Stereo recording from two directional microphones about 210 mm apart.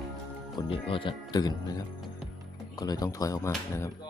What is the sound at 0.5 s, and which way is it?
Speech, 25° left (ahead or behind).